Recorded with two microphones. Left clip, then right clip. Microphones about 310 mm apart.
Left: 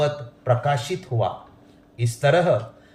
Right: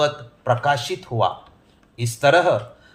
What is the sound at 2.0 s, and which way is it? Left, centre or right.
Speech, right.